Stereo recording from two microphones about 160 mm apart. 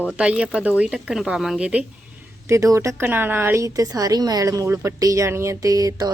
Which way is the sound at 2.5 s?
20° right (ahead or behind).